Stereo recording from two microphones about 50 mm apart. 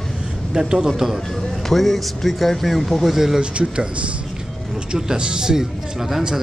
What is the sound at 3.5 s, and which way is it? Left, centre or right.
Speech, centre.